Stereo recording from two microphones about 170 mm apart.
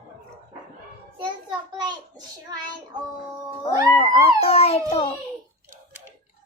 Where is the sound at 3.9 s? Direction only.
30° left (ahead or behind).